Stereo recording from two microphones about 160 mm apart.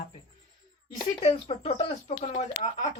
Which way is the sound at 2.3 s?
50° left (ahead or behind).